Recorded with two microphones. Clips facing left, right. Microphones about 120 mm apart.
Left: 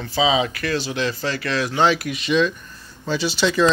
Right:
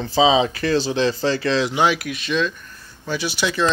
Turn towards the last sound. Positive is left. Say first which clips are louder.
# left 3 dB
turn(degrees=-5)  # may be behind; listen again after turning